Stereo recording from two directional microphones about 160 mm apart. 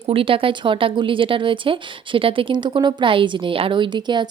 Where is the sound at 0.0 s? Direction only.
35° right (ahead or behind).